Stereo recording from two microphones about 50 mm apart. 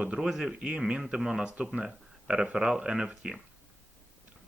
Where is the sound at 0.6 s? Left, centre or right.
Centre.